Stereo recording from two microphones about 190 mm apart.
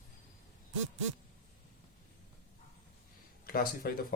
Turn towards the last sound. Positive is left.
turn(degrees=50)  # may be behind; listen again after turning